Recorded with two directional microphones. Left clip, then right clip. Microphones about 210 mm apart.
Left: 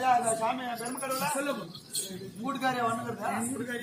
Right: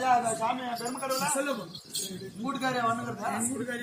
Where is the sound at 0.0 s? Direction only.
5° right (ahead or behind).